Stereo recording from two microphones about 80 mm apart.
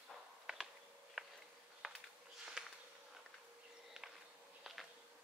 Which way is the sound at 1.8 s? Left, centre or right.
Centre.